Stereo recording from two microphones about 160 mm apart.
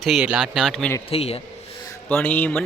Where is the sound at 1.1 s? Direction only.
40° left (ahead or behind).